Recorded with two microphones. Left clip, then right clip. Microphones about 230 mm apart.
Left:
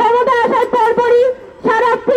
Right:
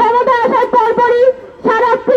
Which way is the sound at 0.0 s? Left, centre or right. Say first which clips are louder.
Right 1 dB; left.